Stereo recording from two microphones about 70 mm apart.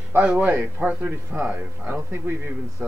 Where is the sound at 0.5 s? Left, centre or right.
Right.